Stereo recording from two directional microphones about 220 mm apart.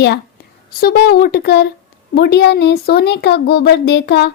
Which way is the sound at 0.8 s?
45° left (ahead or behind).